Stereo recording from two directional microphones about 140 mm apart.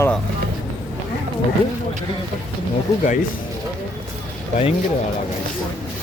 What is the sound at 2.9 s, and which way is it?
Speech, 20° left (ahead or behind).